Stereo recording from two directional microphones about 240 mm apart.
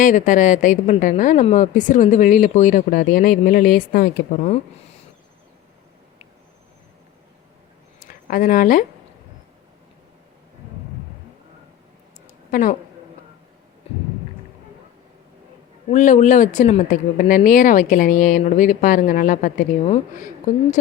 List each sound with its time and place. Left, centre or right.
0.0 s a woman's voice: left
7.9 s a sound: left
12.5 s speech: left
15.9 s a woman's voice: left